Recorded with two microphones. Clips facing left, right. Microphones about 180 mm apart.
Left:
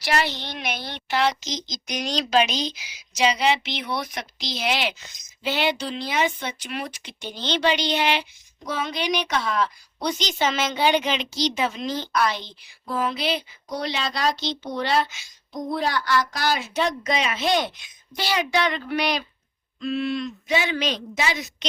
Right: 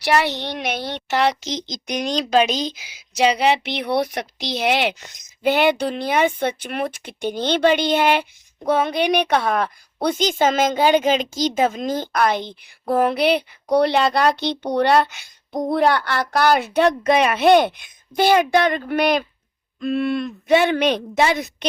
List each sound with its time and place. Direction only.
0.0 s a woman's voice: 65° right (ahead or behind)